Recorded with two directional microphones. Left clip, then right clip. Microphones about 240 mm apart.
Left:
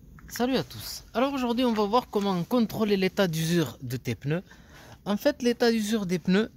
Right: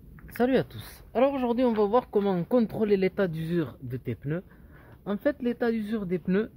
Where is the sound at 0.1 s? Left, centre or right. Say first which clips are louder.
Right 3 dB; centre.